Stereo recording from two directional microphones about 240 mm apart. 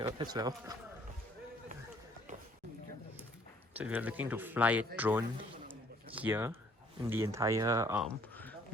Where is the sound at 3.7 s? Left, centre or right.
Centre.